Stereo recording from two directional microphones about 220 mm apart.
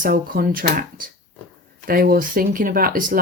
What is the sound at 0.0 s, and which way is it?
Speech, 40° right (ahead or behind).